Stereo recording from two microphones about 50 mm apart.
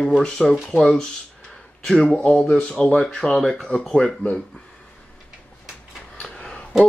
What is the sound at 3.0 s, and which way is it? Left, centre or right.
Speech, centre.